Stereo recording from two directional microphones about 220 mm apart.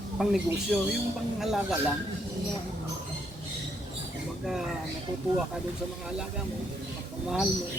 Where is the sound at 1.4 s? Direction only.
Centre (ahead or behind).